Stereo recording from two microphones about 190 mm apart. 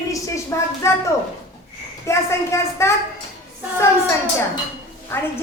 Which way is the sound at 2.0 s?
15° left (ahead or behind).